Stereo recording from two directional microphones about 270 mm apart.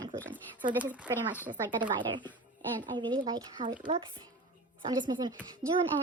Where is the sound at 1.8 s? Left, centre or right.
Centre.